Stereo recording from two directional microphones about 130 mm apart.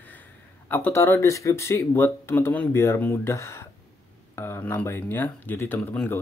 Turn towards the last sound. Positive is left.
turn(degrees=15)  # may be behind; listen again after turning